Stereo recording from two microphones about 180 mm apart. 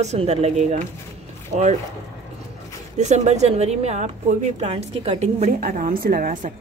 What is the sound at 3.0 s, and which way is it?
Speech, 40° right (ahead or behind).